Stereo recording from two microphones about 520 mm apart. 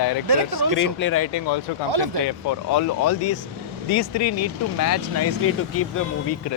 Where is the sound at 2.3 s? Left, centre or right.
Left.